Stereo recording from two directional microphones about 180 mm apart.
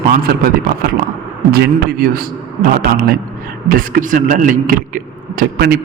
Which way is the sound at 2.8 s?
55° right (ahead or behind).